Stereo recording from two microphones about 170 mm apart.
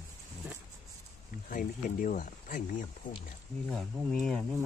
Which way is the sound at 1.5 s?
50° left (ahead or behind).